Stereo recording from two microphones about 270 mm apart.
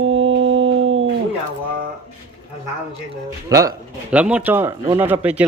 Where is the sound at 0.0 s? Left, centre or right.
Right.